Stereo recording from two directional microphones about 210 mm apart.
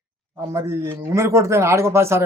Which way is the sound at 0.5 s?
10° right (ahead or behind).